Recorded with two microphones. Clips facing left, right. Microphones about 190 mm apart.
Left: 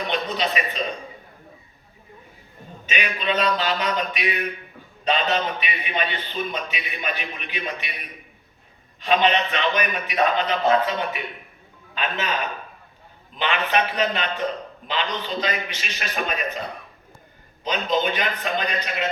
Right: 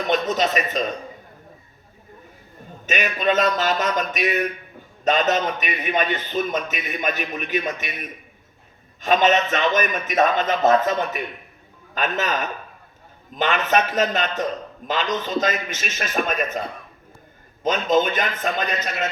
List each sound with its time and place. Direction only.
0.1 s a man's voice: 45° right (ahead or behind)
2.8 s a man's voice: 45° right (ahead or behind)
17.6 s a man's voice: 45° right (ahead or behind)